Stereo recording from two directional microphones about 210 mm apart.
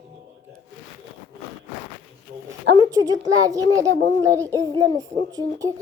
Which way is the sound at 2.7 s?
15° right (ahead or behind).